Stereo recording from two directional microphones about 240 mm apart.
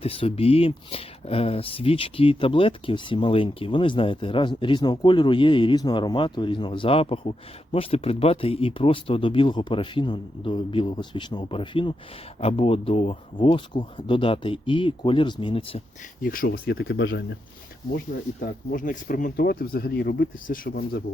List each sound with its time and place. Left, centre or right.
0.0 s speech: left
16.2 s speech: left
16.7 s speech: left